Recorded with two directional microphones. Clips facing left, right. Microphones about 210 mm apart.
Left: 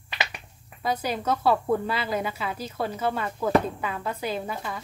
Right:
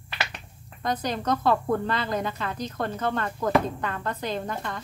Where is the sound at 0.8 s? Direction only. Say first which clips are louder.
Even; 10° left (ahead or behind).